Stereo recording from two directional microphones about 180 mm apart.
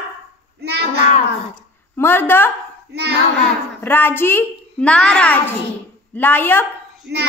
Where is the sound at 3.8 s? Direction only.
10° left (ahead or behind).